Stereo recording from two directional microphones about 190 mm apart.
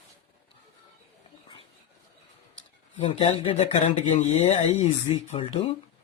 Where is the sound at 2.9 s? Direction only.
30° left (ahead or behind).